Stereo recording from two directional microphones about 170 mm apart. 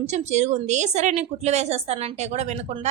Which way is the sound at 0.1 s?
40° right (ahead or behind).